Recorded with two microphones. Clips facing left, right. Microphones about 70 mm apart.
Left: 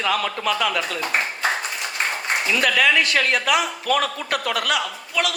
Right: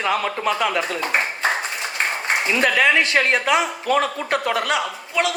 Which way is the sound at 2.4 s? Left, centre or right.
Right.